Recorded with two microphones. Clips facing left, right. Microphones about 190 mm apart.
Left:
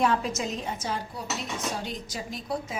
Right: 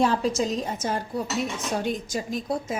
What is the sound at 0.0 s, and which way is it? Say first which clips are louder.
A woman's voice: right 3 dB; 30° right (ahead or behind).